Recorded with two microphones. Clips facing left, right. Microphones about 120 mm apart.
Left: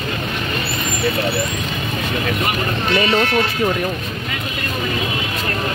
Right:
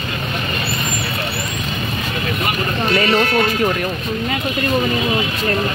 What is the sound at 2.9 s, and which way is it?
Speech, 20° left (ahead or behind).